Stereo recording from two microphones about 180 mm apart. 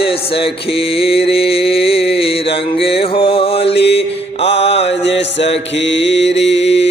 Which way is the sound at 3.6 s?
70° left (ahead or behind).